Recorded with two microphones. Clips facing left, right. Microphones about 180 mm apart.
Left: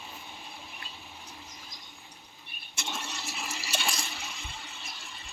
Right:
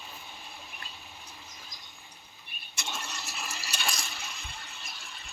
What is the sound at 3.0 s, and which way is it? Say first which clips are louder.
Toilet flush: left 1 dB; 15° left (ahead or behind).